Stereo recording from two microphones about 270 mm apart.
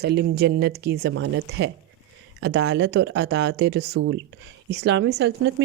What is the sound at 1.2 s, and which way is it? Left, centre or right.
Speech, right.